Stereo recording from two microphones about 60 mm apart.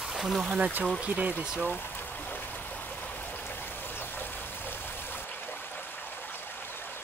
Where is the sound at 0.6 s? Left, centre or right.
Right.